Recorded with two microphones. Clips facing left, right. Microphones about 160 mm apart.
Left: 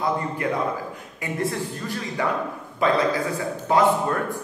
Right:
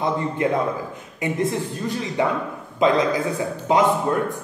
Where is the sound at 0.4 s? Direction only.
20° right (ahead or behind).